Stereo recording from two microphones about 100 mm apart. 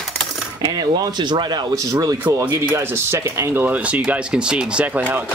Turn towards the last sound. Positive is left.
turn(degrees=-15)  # may be behind; listen again after turning